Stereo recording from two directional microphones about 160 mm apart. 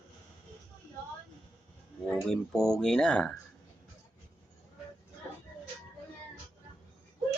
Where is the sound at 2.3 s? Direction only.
5° left (ahead or behind).